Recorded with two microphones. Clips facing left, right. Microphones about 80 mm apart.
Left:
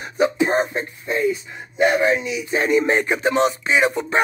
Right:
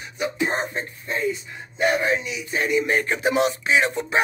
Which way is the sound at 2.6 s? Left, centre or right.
Left.